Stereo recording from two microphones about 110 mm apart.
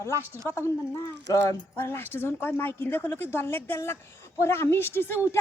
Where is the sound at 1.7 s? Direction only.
20° left (ahead or behind).